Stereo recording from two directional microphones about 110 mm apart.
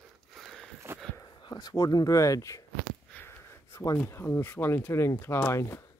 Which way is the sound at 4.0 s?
25° left (ahead or behind).